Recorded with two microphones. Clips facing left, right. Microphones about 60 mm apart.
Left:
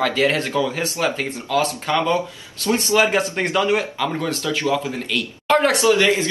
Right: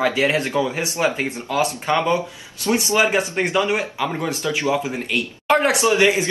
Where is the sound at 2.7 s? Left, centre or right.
Centre.